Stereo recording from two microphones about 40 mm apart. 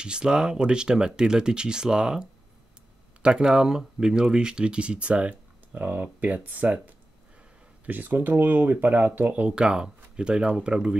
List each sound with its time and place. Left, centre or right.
0.0 s speech: right
7.8 s speech: right
9.4 s speech: right